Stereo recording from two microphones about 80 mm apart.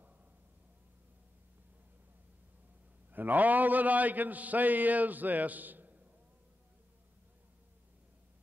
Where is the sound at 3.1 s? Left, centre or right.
Right.